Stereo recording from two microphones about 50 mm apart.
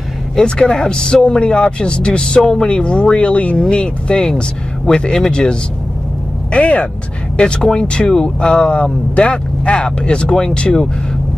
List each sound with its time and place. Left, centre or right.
0.4 s speech: centre